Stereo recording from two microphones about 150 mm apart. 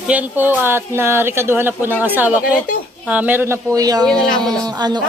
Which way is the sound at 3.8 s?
25° right (ahead or behind).